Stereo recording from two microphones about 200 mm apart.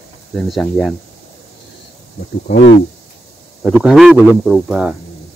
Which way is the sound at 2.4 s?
60° left (ahead or behind).